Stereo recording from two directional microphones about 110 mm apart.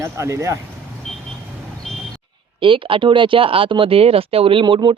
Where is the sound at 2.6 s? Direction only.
50° right (ahead or behind).